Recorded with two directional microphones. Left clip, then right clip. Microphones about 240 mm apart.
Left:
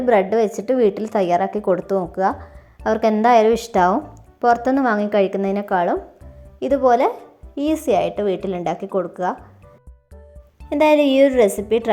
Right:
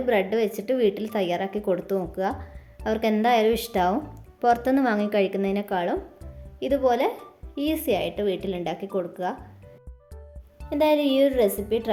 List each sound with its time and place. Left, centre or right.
0.0 s speech: centre
10.7 s a woman's voice: left